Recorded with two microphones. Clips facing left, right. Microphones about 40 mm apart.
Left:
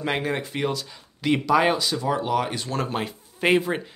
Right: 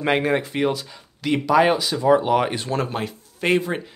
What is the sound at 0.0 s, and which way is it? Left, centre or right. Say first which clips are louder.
Speech: right 6 dB; centre.